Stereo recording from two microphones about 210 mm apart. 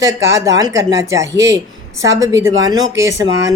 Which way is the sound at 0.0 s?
15° right (ahead or behind).